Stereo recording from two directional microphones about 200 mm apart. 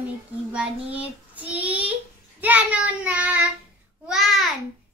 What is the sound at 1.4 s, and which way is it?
A child's voice, 10° right (ahead or behind).